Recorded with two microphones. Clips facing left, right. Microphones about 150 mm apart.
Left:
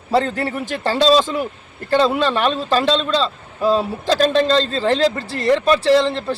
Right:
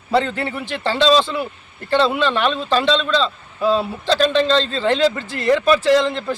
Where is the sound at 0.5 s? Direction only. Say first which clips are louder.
Left 2 dB; 40° left (ahead or behind).